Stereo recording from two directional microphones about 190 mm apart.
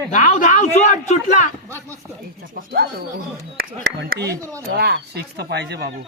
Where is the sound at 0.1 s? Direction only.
40° left (ahead or behind).